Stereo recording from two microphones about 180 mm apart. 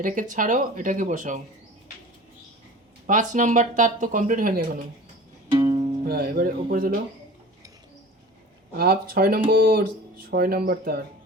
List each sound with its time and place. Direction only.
0.0 s speech: 45° right (ahead or behind)
3.1 s speech: 45° right (ahead or behind)
5.5 s music: 20° right (ahead or behind)
6.1 s speech: 60° right (ahead or behind)
8.7 s speech: 55° right (ahead or behind)